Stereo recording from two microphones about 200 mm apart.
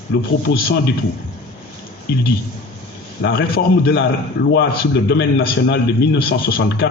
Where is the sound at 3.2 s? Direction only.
55° left (ahead or behind).